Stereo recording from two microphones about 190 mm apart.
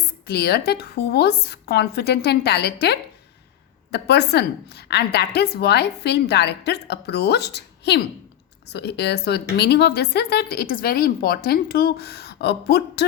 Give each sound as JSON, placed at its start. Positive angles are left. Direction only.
{"t": 0.3, "sound": "speech", "side_deg": 55}